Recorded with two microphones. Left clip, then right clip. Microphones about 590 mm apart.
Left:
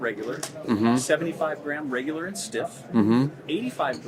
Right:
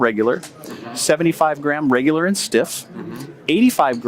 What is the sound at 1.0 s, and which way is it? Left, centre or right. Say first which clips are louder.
Speech: right 9 dB; right.